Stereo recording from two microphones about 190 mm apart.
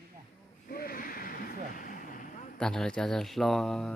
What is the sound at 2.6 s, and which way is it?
Speech, 5° left (ahead or behind).